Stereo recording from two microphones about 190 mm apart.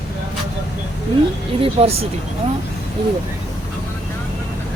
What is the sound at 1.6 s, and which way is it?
Speech, 30° right (ahead or behind).